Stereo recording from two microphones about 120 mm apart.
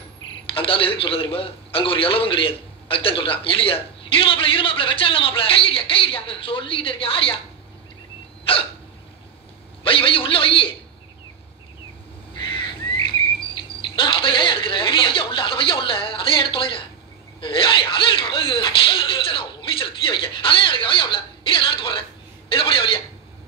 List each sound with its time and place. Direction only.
0.5 s a man's voice: 50° left (ahead or behind)
8.5 s a man's voice: 50° left (ahead or behind)
9.8 s a man's voice: 50° left (ahead or behind)
13.7 s a man's voice: 45° left (ahead or behind)